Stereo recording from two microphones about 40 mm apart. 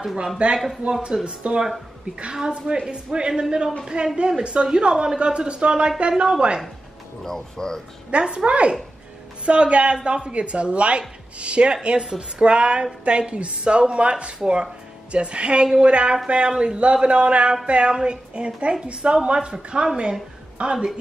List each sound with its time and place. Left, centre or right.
0.4 s a woman's voice: right
4.4 s a woman's voice: right
7.2 s speech: centre
8.1 s a woman's voice: right